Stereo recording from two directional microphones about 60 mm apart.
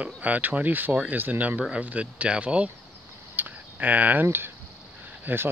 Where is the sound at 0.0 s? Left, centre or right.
Right.